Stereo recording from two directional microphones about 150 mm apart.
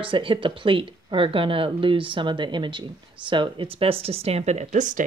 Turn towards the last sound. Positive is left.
turn(degrees=-55)  # may be behind; listen again after turning